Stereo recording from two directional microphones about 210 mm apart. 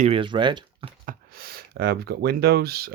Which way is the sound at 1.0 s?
45° right (ahead or behind).